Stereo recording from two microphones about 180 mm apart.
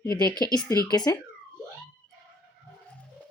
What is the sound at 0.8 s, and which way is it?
Speech, 20° left (ahead or behind).